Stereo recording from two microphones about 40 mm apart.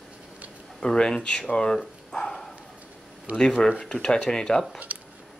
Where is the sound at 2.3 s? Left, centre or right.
Centre.